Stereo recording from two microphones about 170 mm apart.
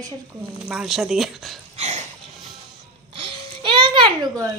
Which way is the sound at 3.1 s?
30° right (ahead or behind).